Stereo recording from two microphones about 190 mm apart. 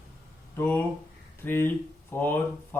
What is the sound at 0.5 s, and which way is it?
Mantra, 10° left (ahead or behind).